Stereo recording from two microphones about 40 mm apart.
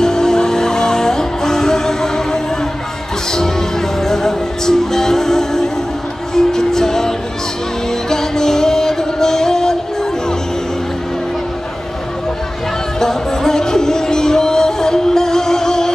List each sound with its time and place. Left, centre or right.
0.0 s music: centre
13.0 s music: centre